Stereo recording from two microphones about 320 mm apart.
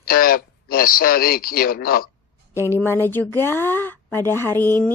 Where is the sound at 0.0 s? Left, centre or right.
Left.